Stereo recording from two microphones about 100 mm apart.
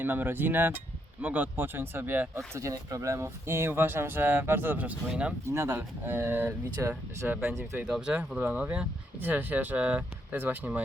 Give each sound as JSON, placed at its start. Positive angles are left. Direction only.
{"t": 0.0, "sound": "speech", "side_deg": -20}
{"t": 2.6, "sound": "speech", "side_deg": -35}
{"t": 5.5, "sound": "speech", "side_deg": -25}
{"t": 7.8, "sound": "speech", "side_deg": -10}